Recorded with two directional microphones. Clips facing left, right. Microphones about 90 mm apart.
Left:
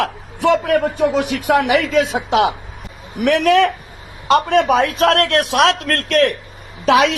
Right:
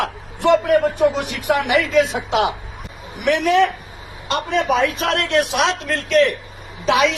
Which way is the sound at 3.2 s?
65° left (ahead or behind).